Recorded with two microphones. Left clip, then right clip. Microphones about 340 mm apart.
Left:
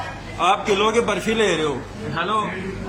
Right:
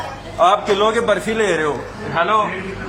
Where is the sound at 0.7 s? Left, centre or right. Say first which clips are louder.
Right 3 dB; centre.